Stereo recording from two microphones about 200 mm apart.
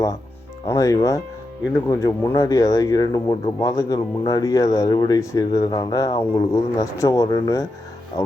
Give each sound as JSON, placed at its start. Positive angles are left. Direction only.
{"t": 0.7, "sound": "speech", "side_deg": 15}